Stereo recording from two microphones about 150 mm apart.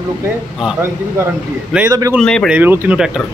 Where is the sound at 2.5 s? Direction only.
15° right (ahead or behind).